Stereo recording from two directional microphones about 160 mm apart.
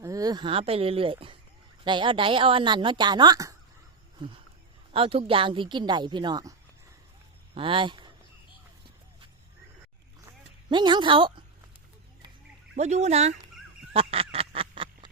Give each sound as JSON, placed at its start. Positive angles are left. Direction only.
{"t": 0.0, "sound": "a woman's voice", "side_deg": -20}
{"t": 7.5, "sound": "speech", "side_deg": -35}
{"t": 10.7, "sound": "a woman's voice", "side_deg": -30}
{"t": 12.7, "sound": "speech", "side_deg": -45}
{"t": 13.9, "sound": "duck", "side_deg": -35}